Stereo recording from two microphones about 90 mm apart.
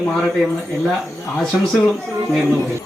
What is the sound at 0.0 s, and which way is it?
Speech, 5° left (ahead or behind).